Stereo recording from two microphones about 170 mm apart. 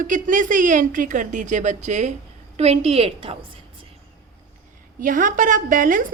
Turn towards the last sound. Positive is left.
turn(degrees=-50)  # may be behind; listen again after turning